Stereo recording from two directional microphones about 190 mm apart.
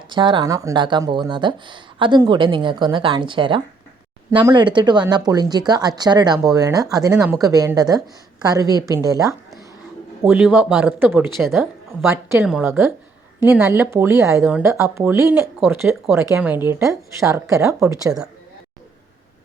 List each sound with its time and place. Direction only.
0.1 s speech: 25° right (ahead or behind)
7.2 s speech: 5° right (ahead or behind)
7.4 s speech: 20° right (ahead or behind)
10.2 s speech: 5° right (ahead or behind)
11.3 s speech: centre (ahead or behind)
12.1 s speech: 15° right (ahead or behind)